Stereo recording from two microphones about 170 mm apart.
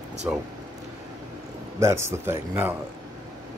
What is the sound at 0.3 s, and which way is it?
Speech, 10° right (ahead or behind).